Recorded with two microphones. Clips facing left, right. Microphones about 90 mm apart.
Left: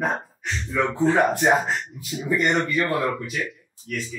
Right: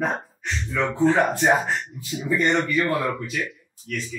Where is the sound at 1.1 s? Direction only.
15° left (ahead or behind).